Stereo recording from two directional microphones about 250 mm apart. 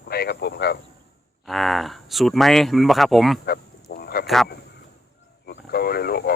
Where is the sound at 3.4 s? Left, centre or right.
Left.